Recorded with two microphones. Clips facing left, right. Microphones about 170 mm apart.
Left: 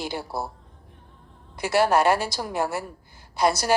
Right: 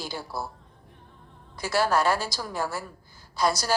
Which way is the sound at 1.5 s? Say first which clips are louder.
Left 4 dB; 60° left (ahead or behind).